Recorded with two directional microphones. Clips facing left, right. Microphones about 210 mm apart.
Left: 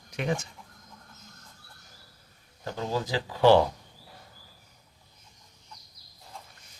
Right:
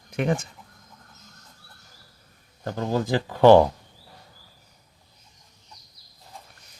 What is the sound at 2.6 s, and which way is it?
Speech, 55° right (ahead or behind).